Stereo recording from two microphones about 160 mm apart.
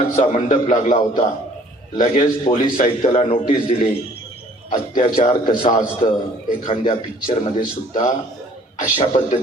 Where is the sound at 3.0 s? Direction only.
40° left (ahead or behind).